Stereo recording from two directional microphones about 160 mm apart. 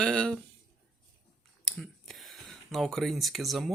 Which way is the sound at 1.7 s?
Centre (ahead or behind).